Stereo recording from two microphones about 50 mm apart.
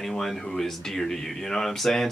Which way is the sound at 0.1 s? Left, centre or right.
Centre.